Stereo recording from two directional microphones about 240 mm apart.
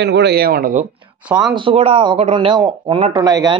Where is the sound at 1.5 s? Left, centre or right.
Right.